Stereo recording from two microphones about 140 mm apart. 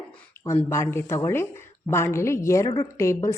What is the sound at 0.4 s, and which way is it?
Speech, 20° left (ahead or behind).